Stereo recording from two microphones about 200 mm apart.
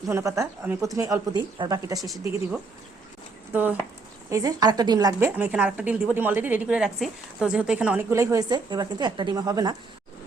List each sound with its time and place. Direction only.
0.1 s a woman's voice: 15° right (ahead or behind)
2.0 s a woman's voice: centre (ahead or behind); by 9.7 s 20° right (ahead or behind)